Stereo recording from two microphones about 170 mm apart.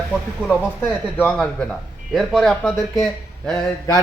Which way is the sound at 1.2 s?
10° left (ahead or behind).